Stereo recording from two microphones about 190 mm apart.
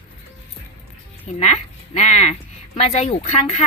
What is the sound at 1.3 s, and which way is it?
Speech, 35° left (ahead or behind).